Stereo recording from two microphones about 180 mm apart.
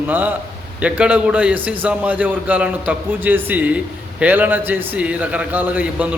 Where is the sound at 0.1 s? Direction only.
10° right (ahead or behind).